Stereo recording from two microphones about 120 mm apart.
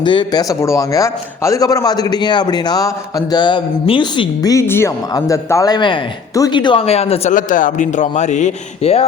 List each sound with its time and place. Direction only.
0.0 s a man's voice: 40° left (ahead or behind)
0.4 s a man's voice: 25° left (ahead or behind); by 4.3 s 45° left (ahead or behind)
4.4 s a man's voice: 25° left (ahead or behind); by 6.8 s 40° left (ahead or behind)
6.8 s a man's voice: 60° left (ahead or behind)